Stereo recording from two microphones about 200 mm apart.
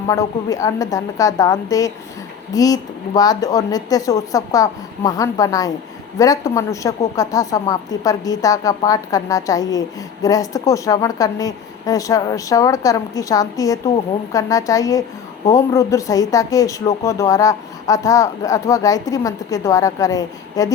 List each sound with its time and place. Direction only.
0.1 s speech: 15° left (ahead or behind)